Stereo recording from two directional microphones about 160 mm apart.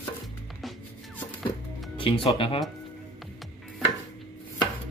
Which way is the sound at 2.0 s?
30° left (ahead or behind).